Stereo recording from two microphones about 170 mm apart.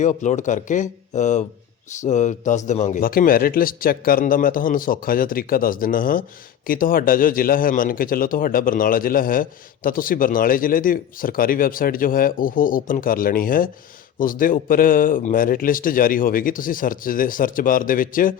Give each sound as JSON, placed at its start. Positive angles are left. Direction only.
{"t": 0.0, "sound": "speech", "side_deg": 45}
{"t": 3.0, "sound": "a man's voice", "side_deg": 55}